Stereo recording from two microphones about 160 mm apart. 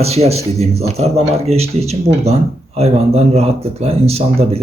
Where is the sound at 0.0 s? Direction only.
40° right (ahead or behind).